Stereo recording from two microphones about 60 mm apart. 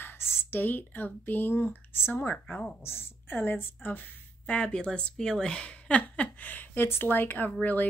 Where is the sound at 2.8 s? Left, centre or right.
Left.